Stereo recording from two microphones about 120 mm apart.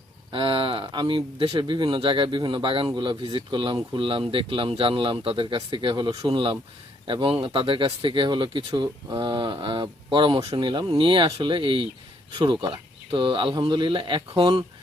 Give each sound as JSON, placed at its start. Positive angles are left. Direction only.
{"t": 0.3, "sound": "speech", "side_deg": -45}